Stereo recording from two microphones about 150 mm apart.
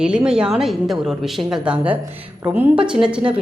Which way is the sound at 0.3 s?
5° right (ahead or behind).